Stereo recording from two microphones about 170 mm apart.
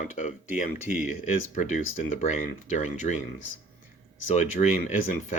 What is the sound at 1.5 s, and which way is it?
Speech, 45° left (ahead or behind).